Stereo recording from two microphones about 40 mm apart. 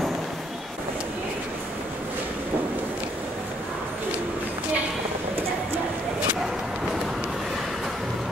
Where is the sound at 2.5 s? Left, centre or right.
Right.